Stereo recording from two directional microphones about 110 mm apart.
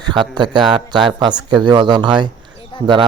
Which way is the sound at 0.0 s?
40° right (ahead or behind).